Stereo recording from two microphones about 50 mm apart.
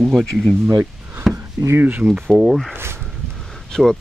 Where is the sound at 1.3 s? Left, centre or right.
Right.